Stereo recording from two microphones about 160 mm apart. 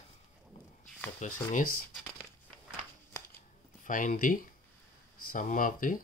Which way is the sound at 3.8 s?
55° left (ahead or behind).